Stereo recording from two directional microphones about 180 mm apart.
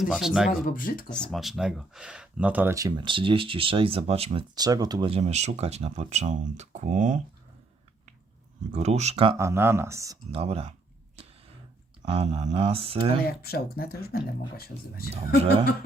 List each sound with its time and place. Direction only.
0.1 s speech: centre (ahead or behind)
0.6 s speech: 50° left (ahead or behind)
1.1 s speech: centre (ahead or behind); by 4.4 s 35° right (ahead or behind)
4.5 s speech: 20° right (ahead or behind); by 7.2 s 45° right (ahead or behind)
8.7 s speech: 40° right (ahead or behind)
9.4 s speech: 15° right (ahead or behind)
10.3 s speech: 35° right (ahead or behind)
12.1 s speech: 35° right (ahead or behind)
13.2 s speech: 60° left (ahead or behind)